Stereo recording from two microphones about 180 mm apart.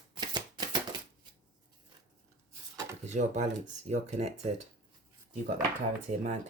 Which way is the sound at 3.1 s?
40° right (ahead or behind).